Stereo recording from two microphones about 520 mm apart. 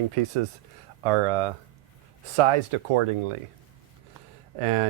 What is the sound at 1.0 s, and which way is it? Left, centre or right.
Speech, right.